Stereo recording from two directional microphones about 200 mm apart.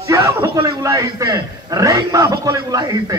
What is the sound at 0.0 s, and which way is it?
A man's voice, 15° right (ahead or behind).